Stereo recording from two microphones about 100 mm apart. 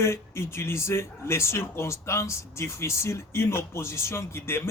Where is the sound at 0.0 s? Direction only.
25° left (ahead or behind).